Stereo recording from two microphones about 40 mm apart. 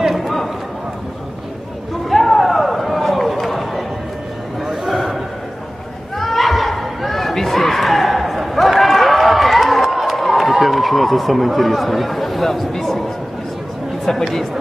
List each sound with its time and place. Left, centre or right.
0.0 s run: centre
2.0 s a sound: centre
14.1 s a woman's voice: centre